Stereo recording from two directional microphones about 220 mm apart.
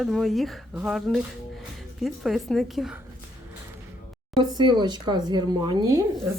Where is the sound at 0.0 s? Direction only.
Centre (ahead or behind).